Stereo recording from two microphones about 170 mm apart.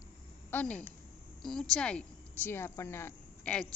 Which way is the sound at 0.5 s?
10° left (ahead or behind).